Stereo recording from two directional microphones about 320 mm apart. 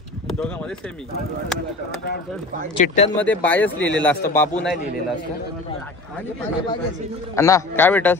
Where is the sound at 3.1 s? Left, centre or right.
Centre.